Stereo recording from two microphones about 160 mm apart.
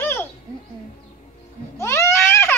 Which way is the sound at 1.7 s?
15° left (ahead or behind).